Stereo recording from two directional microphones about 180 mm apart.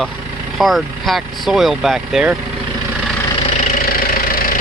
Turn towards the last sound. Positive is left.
turn(degrees=50)  # may be behind; listen again after turning